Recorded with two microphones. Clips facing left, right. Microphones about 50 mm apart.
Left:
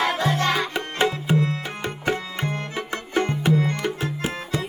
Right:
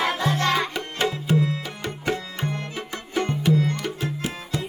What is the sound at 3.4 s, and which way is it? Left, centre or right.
Music, left.